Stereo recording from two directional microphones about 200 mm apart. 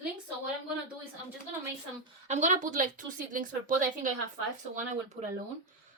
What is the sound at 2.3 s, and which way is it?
Speech, 35° right (ahead or behind).